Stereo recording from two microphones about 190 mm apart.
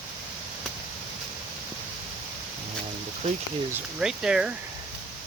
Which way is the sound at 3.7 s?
5° right (ahead or behind).